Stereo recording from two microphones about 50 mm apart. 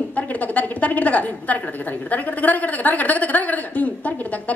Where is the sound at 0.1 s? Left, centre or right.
Left.